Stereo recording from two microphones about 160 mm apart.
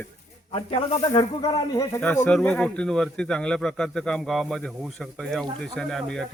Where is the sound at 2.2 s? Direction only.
10° left (ahead or behind).